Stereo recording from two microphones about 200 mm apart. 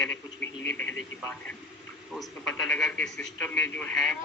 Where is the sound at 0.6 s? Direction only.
70° left (ahead or behind).